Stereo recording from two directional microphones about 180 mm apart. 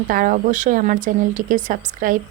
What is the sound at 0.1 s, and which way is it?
A woman's voice, 45° right (ahead or behind).